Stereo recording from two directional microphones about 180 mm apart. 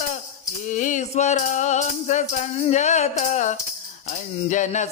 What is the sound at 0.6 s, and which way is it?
Music, 45° left (ahead or behind).